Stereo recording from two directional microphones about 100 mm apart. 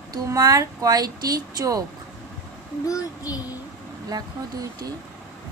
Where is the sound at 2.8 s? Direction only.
35° left (ahead or behind).